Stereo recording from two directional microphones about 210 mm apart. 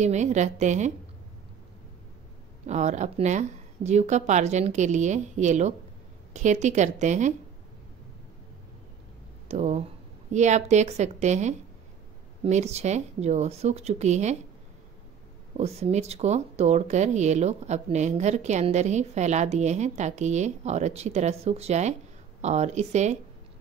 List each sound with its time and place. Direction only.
0.0 s speech: 35° right (ahead or behind)
2.6 s speech: 35° right (ahead or behind)
9.5 s speech: 30° right (ahead or behind)
15.5 s speech: 30° right (ahead or behind)